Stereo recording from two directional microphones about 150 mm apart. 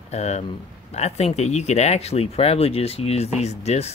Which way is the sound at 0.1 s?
50° left (ahead or behind).